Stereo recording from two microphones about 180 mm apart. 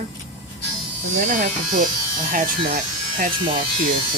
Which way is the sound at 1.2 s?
45° right (ahead or behind).